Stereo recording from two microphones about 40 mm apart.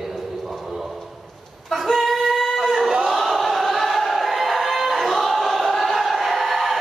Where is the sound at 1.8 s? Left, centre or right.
Centre.